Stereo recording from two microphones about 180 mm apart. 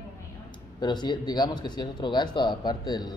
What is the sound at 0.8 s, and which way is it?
Speech, 25° left (ahead or behind).